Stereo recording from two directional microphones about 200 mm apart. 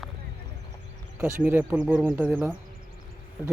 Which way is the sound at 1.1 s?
10° right (ahead or behind).